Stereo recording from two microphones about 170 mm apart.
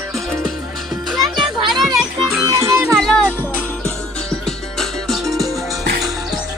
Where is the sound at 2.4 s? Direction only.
15° right (ahead or behind).